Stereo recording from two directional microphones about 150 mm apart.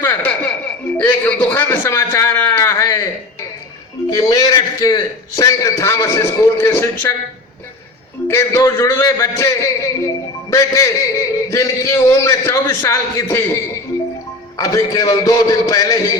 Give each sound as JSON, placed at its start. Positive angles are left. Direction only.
{"t": 0.0, "sound": "a sound", "side_deg": 10}
{"t": 0.9, "sound": "a man's voice", "side_deg": 10}
{"t": 4.1, "sound": "a man's voice", "side_deg": 25}
{"t": 8.3, "sound": "a man's voice", "side_deg": 15}
{"t": 14.6, "sound": "a man's voice", "side_deg": 25}